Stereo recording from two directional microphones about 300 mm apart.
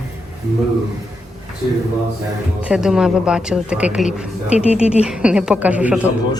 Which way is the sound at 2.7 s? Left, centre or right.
Centre.